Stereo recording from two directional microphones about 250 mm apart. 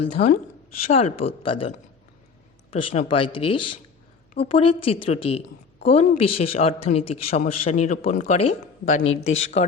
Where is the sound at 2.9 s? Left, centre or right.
Left.